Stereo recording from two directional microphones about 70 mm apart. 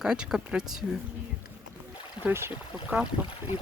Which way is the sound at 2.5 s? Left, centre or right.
Centre.